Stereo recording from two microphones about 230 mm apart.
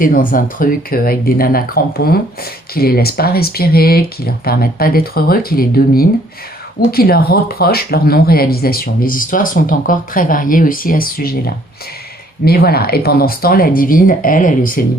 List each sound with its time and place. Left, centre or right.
0.0 s speech: left